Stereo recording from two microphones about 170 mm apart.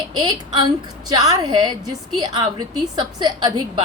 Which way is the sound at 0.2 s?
25° right (ahead or behind).